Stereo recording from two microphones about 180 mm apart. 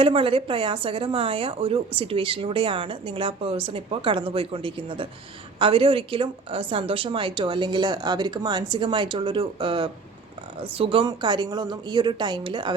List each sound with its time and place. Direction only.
0.0 s speech: 30° right (ahead or behind)